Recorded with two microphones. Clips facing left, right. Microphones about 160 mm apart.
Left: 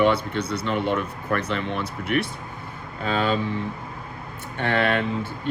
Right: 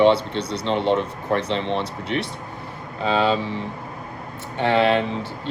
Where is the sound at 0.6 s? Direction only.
25° right (ahead or behind).